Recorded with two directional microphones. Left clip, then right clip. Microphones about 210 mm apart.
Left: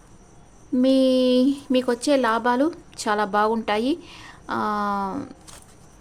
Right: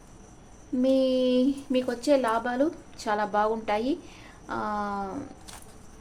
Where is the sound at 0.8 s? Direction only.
45° left (ahead or behind).